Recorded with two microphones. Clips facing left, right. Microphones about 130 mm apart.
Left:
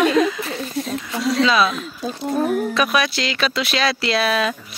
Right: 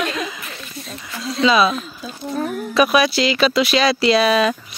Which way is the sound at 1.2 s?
90° left.